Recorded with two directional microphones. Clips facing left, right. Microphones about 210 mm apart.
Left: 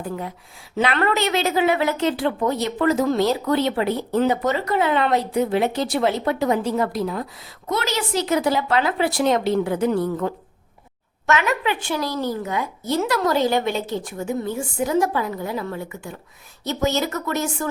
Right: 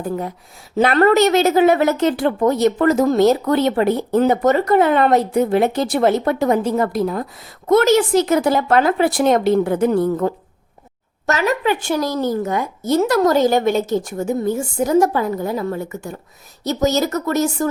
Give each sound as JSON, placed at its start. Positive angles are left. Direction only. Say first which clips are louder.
{"t": 0.0, "sound": "a woman's voice", "louder": "right 5 dB", "side_deg": -45}